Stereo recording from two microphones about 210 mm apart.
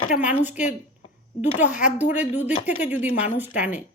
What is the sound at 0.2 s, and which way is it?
Speech, 5° right (ahead or behind).